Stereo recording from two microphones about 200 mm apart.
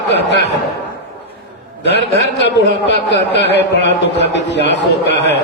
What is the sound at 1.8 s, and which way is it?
A man's voice, 60° left (ahead or behind).